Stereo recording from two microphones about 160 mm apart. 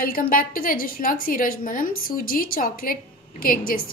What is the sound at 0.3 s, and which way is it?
A woman's voice, 60° left (ahead or behind).